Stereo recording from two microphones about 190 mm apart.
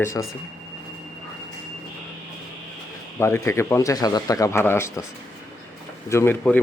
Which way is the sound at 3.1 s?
15° left (ahead or behind).